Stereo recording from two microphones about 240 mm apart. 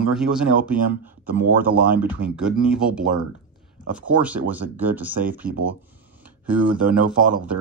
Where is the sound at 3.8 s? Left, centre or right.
Centre.